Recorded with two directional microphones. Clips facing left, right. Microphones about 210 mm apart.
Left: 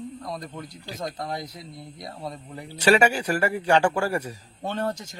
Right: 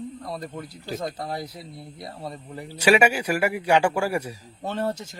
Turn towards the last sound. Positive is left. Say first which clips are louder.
# right 1 dB
turn(degrees=-5)  # may be behind; listen again after turning